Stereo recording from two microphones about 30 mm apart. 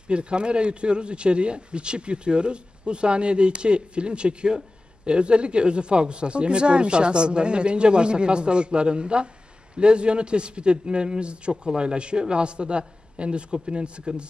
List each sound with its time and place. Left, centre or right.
0.1 s speech: right